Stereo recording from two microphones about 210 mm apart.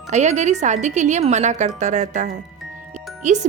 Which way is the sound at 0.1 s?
35° right (ahead or behind).